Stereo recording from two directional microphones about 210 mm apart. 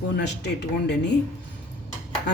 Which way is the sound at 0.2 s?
55° left (ahead or behind).